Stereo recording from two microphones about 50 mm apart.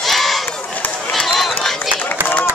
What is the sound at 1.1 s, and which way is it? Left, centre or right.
Run, centre.